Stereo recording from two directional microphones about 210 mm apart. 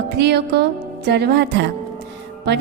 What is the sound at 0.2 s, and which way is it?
A woman's voice, 55° right (ahead or behind).